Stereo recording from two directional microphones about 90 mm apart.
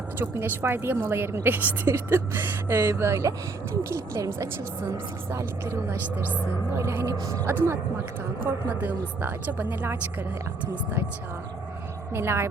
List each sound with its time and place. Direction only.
0.2 s a woman's voice: 25° right (ahead or behind)
12.1 s a woman's voice: 30° right (ahead or behind)